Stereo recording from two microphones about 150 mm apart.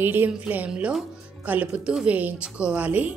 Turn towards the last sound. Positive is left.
turn(degrees=-10)  # may be behind; listen again after turning